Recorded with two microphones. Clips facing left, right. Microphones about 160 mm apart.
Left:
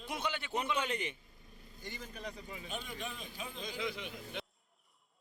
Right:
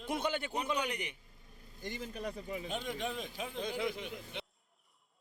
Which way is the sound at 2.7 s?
85° right.